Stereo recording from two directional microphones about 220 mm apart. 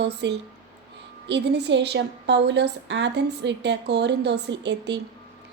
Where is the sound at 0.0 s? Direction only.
50° right (ahead or behind).